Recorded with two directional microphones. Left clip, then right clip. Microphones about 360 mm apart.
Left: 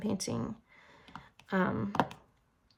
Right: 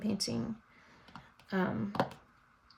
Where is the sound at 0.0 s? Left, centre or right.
Centre.